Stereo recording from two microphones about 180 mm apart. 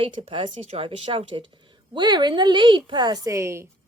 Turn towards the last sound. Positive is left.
turn(degrees=-15)  # may be behind; listen again after turning